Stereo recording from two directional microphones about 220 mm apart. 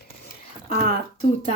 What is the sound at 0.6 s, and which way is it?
Speech, 30° left (ahead or behind).